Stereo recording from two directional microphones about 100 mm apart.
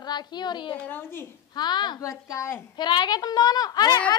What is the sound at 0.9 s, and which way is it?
Speech, 20° left (ahead or behind).